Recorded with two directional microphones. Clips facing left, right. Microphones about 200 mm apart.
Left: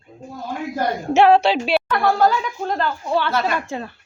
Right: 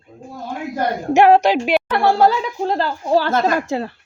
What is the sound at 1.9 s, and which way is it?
Speech, 30° right (ahead or behind).